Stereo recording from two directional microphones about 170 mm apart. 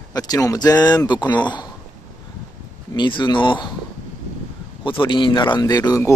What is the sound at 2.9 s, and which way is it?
Speech, 25° left (ahead or behind).